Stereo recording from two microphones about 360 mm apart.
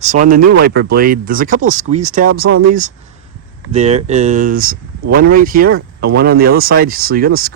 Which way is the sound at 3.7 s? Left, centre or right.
Centre.